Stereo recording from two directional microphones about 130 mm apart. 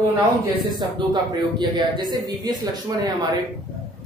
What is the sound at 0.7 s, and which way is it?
Speech, 35° right (ahead or behind).